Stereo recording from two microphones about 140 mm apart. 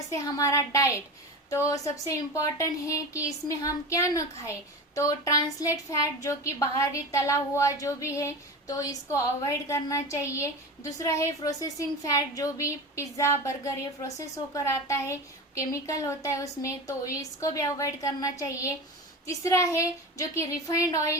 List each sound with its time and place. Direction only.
0.1 s a woman's voice: 20° left (ahead or behind)